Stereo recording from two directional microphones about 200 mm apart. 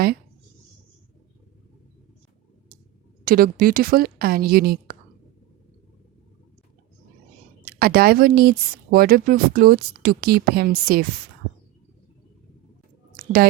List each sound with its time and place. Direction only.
3.2 s speech: 45° right (ahead or behind)
7.6 s speech: 50° right (ahead or behind)